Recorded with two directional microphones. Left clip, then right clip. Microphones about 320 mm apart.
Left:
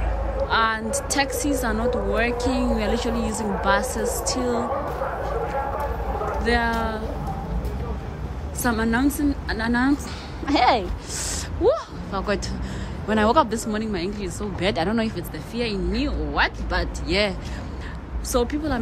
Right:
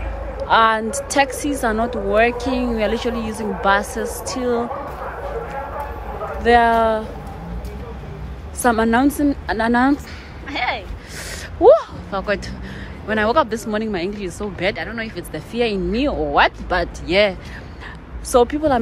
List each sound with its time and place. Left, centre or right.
0.5 s a woman's voice: centre
6.4 s a woman's voice: centre
8.6 s a woman's voice: centre
10.4 s speech: centre
11.6 s a sound: centre
13.1 s a woman's voice: centre
15.3 s a woman's voice: centre